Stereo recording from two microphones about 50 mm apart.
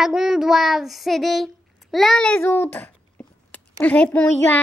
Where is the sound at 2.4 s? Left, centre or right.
Left.